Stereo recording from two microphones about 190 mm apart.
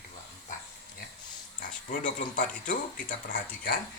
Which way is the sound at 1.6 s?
45° left (ahead or behind).